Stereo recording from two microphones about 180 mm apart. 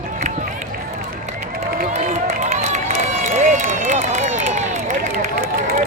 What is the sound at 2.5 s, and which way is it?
Run, 40° right (ahead or behind).